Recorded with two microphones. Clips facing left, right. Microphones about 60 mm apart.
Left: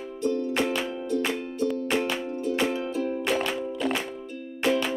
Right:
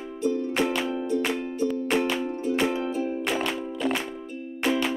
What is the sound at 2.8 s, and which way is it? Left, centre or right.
Music, centre.